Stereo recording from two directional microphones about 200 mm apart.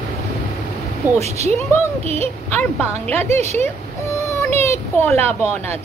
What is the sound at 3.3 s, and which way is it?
Speech, 10° left (ahead or behind).